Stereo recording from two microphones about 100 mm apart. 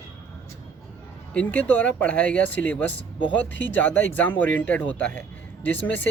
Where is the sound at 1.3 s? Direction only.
15° left (ahead or behind).